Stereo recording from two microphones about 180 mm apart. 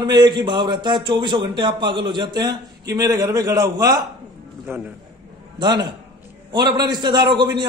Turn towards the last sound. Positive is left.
turn(degrees=-25)  # may be behind; listen again after turning